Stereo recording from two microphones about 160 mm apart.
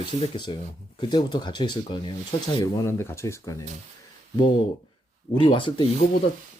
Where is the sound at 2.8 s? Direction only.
15° left (ahead or behind).